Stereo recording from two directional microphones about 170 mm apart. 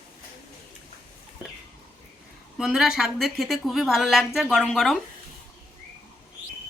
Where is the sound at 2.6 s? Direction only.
5° right (ahead or behind).